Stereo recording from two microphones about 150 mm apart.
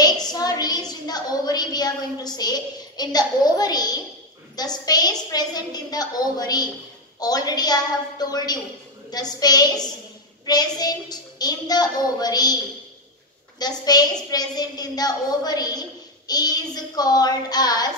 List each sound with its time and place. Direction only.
0.0 s a sound: 25° left (ahead or behind)
4.6 s a woman's voice: 25° left (ahead or behind)
13.6 s a woman's voice: 25° left (ahead or behind)